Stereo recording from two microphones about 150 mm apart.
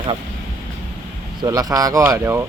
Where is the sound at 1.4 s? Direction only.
25° right (ahead or behind).